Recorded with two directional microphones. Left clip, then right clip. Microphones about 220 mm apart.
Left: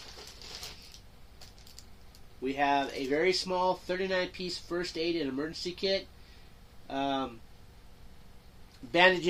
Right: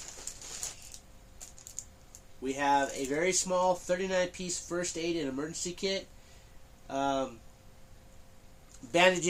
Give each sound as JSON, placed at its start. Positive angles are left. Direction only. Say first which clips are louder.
{"t": 2.4, "sound": "speech", "louder": "even", "side_deg": -20}
{"t": 8.9, "sound": "speech", "louder": "left 1 dB", "side_deg": -15}